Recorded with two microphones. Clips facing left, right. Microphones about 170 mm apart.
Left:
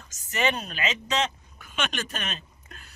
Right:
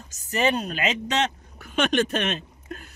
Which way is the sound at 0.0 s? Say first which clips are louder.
Right 3 dB; 35° right (ahead or behind).